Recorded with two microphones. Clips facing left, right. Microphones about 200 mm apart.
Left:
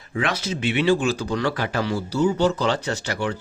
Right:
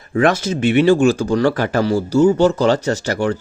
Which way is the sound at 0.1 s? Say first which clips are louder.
Right 9 dB; 50° right (ahead or behind).